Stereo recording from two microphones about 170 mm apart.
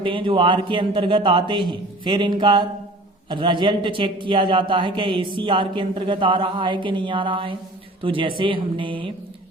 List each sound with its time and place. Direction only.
0.0 s a man's voice: 30° right (ahead or behind)